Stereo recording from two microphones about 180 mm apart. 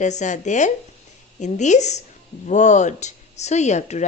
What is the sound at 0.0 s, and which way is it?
Speech, 40° left (ahead or behind).